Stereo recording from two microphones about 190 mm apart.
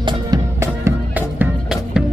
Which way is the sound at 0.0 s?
20° right (ahead or behind).